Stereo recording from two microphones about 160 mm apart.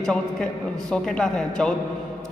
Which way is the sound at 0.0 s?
5° left (ahead or behind).